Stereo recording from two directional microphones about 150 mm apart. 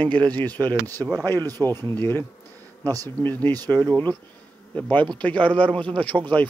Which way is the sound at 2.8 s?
25° right (ahead or behind).